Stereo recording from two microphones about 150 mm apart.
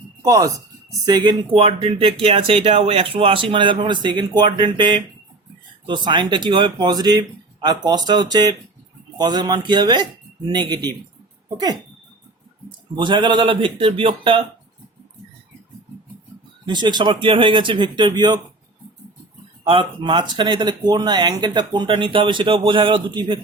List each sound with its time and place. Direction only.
0.2 s speech: 25° right (ahead or behind)
11.4 s a sound: 25° right (ahead or behind)
13.0 s speech: 30° right (ahead or behind)
16.6 s speech: 30° right (ahead or behind)
19.6 s speech: 35° right (ahead or behind)